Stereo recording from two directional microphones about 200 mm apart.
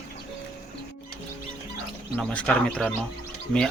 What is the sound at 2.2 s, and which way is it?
Speech, 5° left (ahead or behind).